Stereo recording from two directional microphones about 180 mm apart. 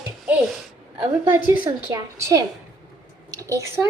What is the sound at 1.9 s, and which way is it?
A woman's voice, 20° right (ahead or behind).